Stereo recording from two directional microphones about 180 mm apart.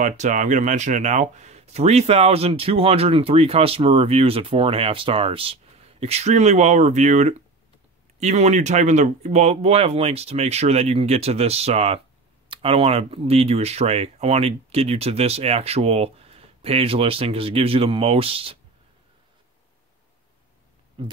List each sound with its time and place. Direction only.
0.0 s speech: 45° right (ahead or behind)